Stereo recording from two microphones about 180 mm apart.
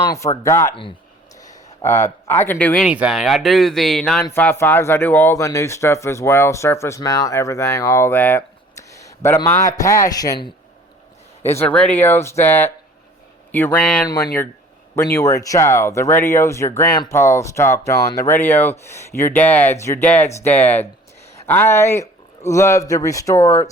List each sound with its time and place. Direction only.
0.0 s speech: 20° left (ahead or behind)
2.8 s speech: 5° right (ahead or behind); by 10.3 s 20° left (ahead or behind)
11.6 s speech: 5° left (ahead or behind)
15.1 s speech: 15° left (ahead or behind)